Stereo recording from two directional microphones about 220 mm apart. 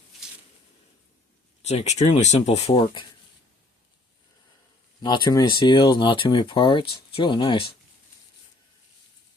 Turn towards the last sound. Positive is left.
turn(degrees=20)  # may be behind; listen again after turning